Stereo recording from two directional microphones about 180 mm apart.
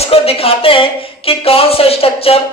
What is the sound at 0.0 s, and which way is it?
Speech, 35° left (ahead or behind).